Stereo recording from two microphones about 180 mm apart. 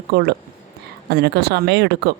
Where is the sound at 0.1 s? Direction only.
65° right (ahead or behind).